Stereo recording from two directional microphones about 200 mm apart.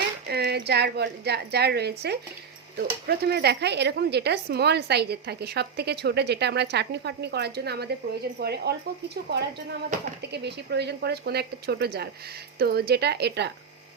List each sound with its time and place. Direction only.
0.3 s speech: 55° right (ahead or behind)
10.3 s speech: 55° right (ahead or behind)